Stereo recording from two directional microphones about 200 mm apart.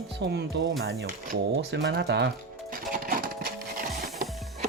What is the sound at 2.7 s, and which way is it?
Music, 45° right (ahead or behind).